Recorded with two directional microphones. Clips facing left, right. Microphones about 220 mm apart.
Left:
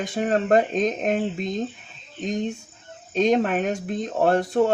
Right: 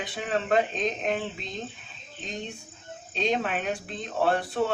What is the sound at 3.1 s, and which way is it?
Speech, 45° left (ahead or behind).